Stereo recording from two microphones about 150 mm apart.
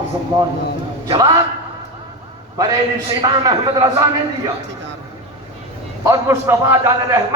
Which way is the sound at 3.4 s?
25° right (ahead or behind).